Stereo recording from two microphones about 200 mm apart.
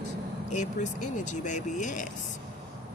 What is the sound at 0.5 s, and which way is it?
Speech, 40° left (ahead or behind).